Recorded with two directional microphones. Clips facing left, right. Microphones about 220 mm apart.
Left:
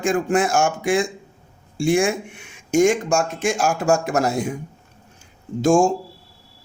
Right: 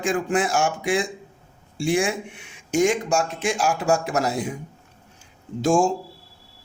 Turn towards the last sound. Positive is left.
turn(degrees=45)  # may be behind; listen again after turning